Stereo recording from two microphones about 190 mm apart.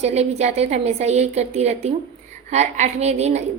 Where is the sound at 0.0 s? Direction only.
35° right (ahead or behind).